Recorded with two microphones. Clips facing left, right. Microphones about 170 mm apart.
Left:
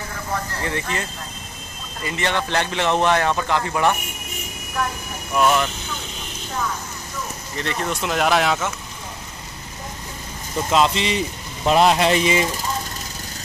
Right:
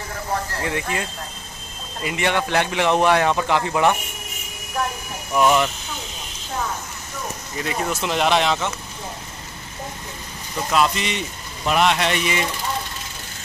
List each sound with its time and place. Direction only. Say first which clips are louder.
0.7 s speech: right 1 dB; 10° right (ahead or behind)
2.0 s speech: right 2 dB; 15° right (ahead or behind)
5.3 s speech: right 1 dB; 15° right (ahead or behind)
7.5 s speech: even; 10° right (ahead or behind)
10.7 s speech: left 2 dB; 25° left (ahead or behind)